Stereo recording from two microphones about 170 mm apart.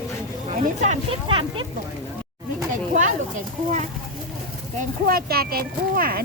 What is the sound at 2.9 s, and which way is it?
Speech, 45° right (ahead or behind).